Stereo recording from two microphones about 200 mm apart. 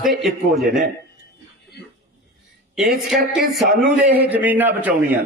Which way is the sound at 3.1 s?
Centre (ahead or behind).